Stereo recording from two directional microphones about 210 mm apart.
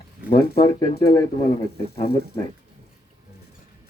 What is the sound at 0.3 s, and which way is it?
Speech, 20° left (ahead or behind).